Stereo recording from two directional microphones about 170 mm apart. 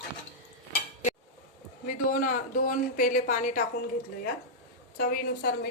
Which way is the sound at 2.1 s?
55° left (ahead or behind).